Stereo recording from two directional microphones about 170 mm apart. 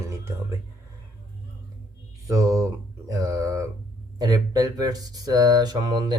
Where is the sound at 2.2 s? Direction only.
20° right (ahead or behind).